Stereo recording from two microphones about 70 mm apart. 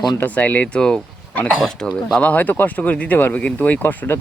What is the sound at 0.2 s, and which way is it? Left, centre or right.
Speech, left.